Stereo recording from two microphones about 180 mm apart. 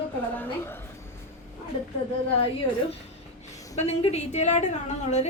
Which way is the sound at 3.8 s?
35° left (ahead or behind).